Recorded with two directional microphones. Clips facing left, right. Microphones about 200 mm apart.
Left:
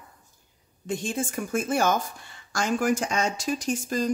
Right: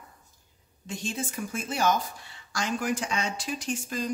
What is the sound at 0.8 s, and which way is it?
A woman's voice, 55° left (ahead or behind).